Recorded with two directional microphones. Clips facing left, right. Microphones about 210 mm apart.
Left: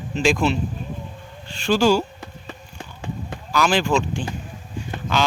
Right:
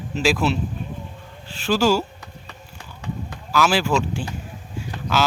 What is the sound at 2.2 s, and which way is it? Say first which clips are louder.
Clip-clop: left 4 dB; 25° left (ahead or behind).